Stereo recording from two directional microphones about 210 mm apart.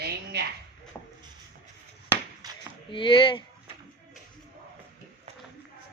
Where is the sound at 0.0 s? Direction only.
50° right (ahead or behind).